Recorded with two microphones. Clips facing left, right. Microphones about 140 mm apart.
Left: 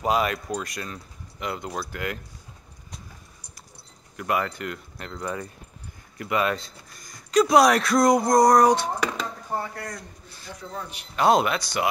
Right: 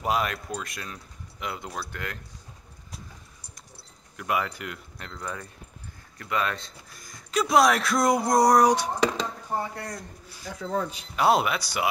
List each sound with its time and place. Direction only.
0.0 s speech: centre (ahead or behind)
4.2 s speech: 5° right (ahead or behind)
4.9 s speech: 5° left (ahead or behind); by 8.9 s 10° right (ahead or behind)
9.6 s speech: 25° right (ahead or behind)
10.6 s speech: 90° right
11.1 s speech: 5° right (ahead or behind)